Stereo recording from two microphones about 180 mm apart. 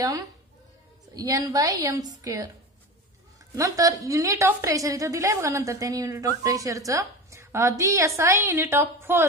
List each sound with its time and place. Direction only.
1.1 s a woman's voice: 20° right (ahead or behind)
3.5 s a woman's voice: 15° right (ahead or behind)